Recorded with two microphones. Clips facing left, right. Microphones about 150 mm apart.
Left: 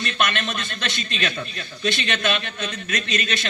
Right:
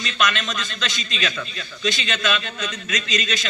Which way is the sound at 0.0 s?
55° left (ahead or behind).